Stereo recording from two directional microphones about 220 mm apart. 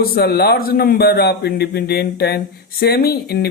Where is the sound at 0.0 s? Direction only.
45° left (ahead or behind).